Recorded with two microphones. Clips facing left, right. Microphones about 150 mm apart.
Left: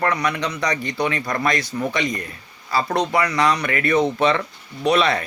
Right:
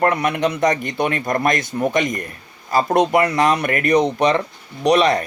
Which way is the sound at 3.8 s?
20° right (ahead or behind).